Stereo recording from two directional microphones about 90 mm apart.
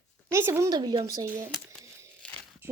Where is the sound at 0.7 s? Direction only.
50° right (ahead or behind).